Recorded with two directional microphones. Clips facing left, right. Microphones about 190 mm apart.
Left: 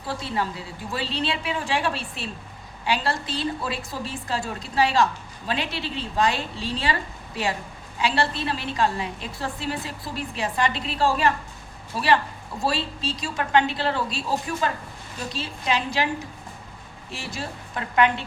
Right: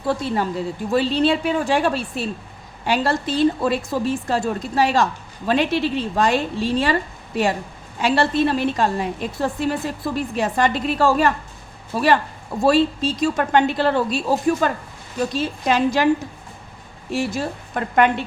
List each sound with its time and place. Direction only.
0.3 s a woman's voice: 45° right (ahead or behind)
8.0 s a woman's voice: 45° right (ahead or behind)
17.1 s a woman's voice: 45° right (ahead or behind)